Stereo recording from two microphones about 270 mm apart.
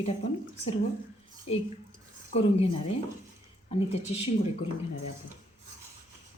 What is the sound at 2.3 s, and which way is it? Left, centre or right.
A woman's voice, left.